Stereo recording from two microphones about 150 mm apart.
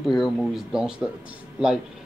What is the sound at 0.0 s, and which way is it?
Speech, centre (ahead or behind).